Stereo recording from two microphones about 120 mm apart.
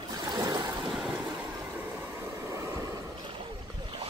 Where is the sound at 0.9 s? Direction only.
10° right (ahead or behind).